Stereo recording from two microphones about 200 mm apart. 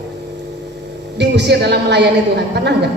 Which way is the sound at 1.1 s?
60° right (ahead or behind).